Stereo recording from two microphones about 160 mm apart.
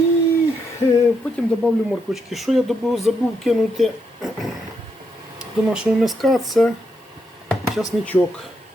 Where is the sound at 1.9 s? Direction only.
Centre (ahead or behind).